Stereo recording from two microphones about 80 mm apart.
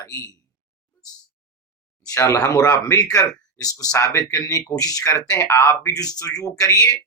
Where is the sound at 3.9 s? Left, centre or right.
Left.